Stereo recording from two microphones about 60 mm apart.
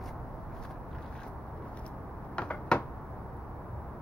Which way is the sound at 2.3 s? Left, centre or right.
Centre.